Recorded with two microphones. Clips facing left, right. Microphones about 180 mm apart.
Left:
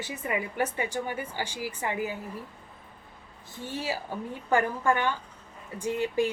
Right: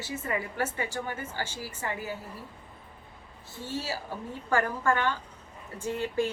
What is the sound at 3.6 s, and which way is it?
Speech, 15° left (ahead or behind).